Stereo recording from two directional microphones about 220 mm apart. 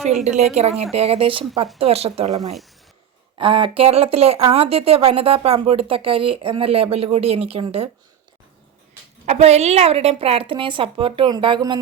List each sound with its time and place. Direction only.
0.3 s speech: 30° right (ahead or behind)
9.2 s speech: 30° right (ahead or behind)